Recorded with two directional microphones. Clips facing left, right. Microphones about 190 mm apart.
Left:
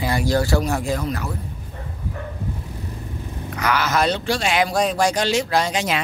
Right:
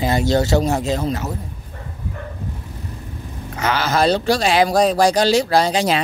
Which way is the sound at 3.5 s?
25° right (ahead or behind).